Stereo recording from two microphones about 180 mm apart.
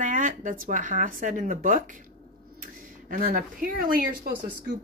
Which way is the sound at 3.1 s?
50° right (ahead or behind).